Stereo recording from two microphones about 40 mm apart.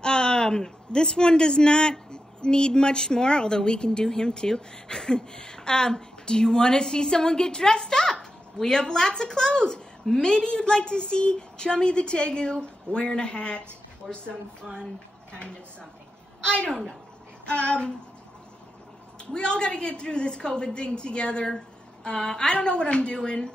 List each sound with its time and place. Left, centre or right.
0.0 s a man's voice: left
14.0 s speech: centre
16.4 s a man's voice: left
19.3 s a man's voice: left